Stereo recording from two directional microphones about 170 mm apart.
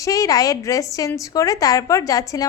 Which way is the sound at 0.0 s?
20° left (ahead or behind).